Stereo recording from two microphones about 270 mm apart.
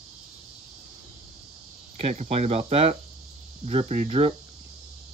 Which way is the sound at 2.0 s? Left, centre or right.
Right.